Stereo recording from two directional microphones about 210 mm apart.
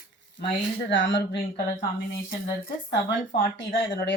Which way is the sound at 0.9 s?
60° left (ahead or behind).